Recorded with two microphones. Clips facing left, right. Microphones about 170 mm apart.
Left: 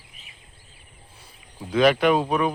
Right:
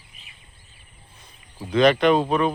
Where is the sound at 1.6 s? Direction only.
5° left (ahead or behind).